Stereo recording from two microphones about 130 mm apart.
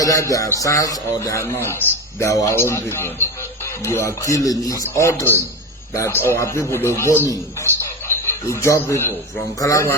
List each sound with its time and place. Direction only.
0.0 s a man's voice: 25° left (ahead or behind)